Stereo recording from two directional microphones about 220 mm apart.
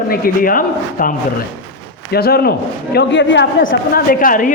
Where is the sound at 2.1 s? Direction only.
45° left (ahead or behind).